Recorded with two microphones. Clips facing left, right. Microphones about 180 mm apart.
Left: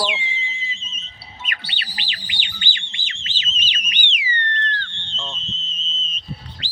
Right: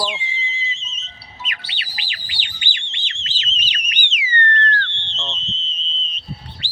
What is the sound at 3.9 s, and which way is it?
Theremin, 45° right (ahead or behind).